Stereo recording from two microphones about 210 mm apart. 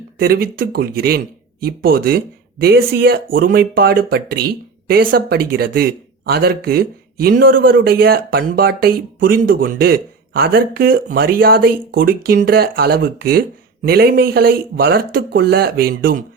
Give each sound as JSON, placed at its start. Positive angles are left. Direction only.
{"t": 0.2, "sound": "speech", "side_deg": -45}